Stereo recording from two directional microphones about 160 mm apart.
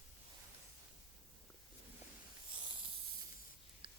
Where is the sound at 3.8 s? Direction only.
30° right (ahead or behind).